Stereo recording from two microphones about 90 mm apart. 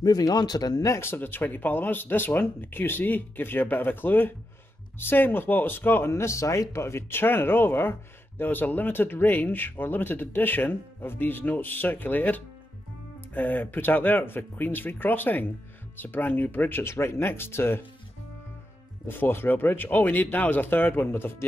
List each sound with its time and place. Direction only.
0.0 s speech: 45° left (ahead or behind)
0.9 s speech: 25° left (ahead or behind)
19.0 s speech: 25° left (ahead or behind)